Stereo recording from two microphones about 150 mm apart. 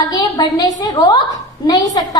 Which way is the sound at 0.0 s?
25° left (ahead or behind).